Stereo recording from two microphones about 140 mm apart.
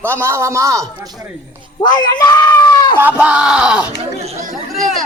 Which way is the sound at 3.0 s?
10° right (ahead or behind).